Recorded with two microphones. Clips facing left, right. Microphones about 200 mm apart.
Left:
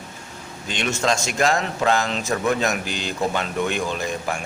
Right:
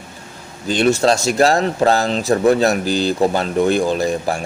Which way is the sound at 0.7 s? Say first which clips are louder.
Right 9 dB; 35° right (ahead or behind).